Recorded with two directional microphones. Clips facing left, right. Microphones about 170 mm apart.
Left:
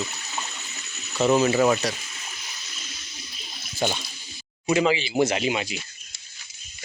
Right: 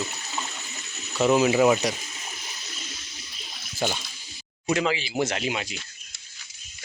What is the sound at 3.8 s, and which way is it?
Speech, centre (ahead or behind).